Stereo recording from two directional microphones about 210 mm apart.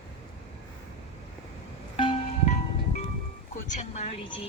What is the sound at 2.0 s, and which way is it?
Music, 25° left (ahead or behind).